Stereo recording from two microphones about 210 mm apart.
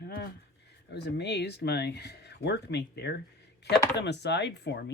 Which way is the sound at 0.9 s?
50° left (ahead or behind).